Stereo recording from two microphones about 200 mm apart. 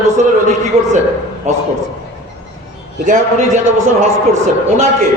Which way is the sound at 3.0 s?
40° right (ahead or behind).